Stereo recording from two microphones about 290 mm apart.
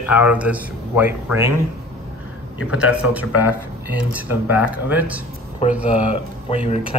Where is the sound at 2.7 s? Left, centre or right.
Centre.